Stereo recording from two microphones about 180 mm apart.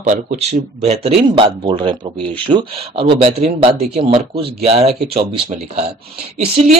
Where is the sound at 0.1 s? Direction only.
40° right (ahead or behind).